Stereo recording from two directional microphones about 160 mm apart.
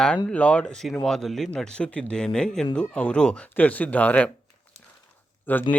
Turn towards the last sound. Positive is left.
turn(degrees=10)  # may be behind; listen again after turning